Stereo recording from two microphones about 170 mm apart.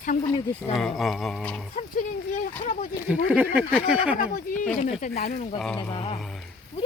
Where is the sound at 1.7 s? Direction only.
45° left (ahead or behind).